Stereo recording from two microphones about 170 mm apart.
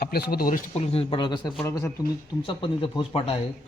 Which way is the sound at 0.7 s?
35° left (ahead or behind).